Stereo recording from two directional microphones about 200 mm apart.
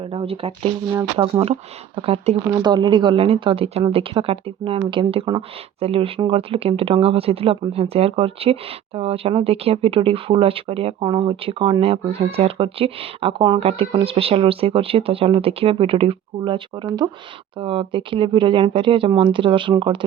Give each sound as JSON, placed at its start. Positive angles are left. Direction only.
{"t": 0.1, "sound": "speech", "side_deg": -30}